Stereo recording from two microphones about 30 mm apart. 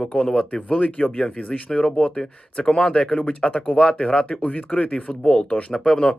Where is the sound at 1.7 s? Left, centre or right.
Left.